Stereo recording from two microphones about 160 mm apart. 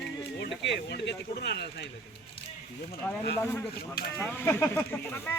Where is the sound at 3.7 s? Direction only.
70° left (ahead or behind).